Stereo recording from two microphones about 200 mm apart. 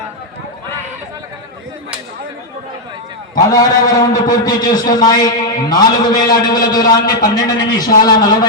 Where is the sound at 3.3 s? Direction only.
20° left (ahead or behind).